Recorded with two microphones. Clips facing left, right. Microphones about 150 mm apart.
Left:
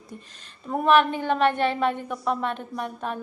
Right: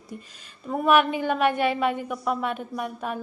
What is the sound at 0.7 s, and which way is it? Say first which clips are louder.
A woman's voice: left 1 dB; centre (ahead or behind).